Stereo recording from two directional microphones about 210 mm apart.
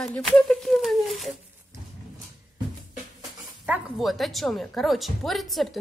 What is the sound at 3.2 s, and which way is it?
Speech, 5° right (ahead or behind).